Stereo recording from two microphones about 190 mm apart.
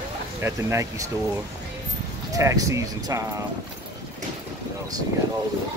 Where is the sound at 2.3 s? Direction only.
15° right (ahead or behind).